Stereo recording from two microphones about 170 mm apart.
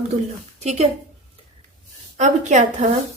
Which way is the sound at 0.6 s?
40° right (ahead or behind).